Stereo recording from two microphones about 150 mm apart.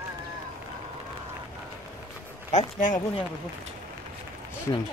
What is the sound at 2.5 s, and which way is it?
Speech, 55° left (ahead or behind).